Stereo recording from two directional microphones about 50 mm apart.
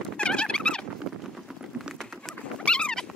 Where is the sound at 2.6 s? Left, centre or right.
Centre.